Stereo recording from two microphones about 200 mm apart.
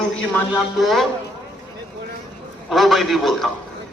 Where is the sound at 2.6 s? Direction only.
Centre (ahead or behind).